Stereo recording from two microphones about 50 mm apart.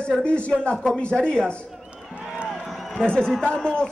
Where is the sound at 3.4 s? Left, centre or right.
Centre.